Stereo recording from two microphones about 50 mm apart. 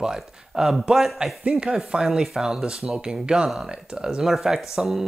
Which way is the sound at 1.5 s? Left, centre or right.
Centre.